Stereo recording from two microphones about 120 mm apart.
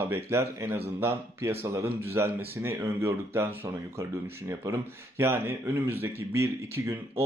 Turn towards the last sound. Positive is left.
turn(degrees=-25)  # may be behind; listen again after turning